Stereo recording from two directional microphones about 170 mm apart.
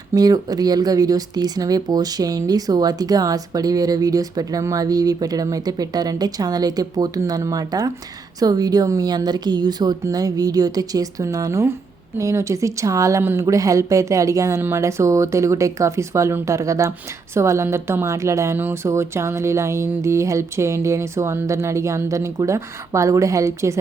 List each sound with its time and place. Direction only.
0.1 s a woman's voice: 25° right (ahead or behind)